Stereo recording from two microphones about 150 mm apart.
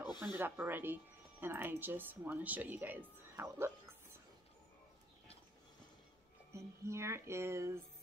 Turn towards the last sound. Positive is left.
turn(degrees=-15)  # may be behind; listen again after turning